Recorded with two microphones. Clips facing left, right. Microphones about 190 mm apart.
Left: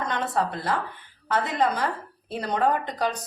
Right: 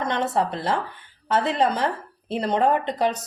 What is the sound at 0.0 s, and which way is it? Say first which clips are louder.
Speech: right 3 dB; 25° right (ahead or behind).